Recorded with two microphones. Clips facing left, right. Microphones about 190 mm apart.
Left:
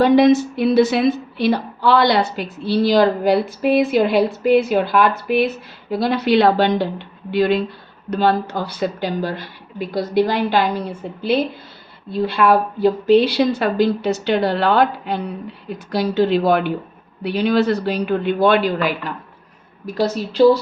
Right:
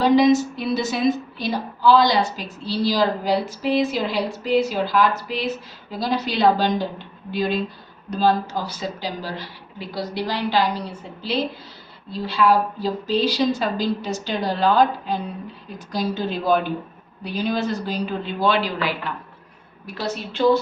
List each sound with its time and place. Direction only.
0.0 s a woman's voice: 55° left (ahead or behind)
20.0 s a woman's voice: 35° left (ahead or behind)